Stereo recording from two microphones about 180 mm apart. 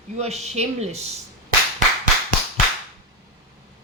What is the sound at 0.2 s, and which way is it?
A woman's voice, 35° right (ahead or behind).